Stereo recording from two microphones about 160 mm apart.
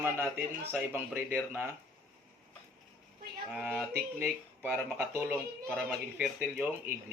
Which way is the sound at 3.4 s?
5° right (ahead or behind).